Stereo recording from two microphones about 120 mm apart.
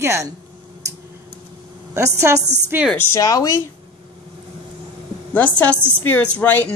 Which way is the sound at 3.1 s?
30° left (ahead or behind).